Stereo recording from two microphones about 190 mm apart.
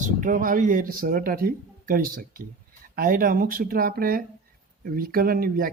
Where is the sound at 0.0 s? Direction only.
45° right (ahead or behind).